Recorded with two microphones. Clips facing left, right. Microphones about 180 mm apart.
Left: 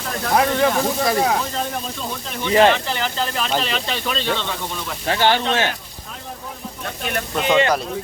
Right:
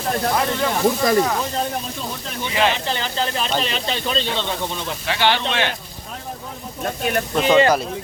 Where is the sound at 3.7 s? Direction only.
30° right (ahead or behind).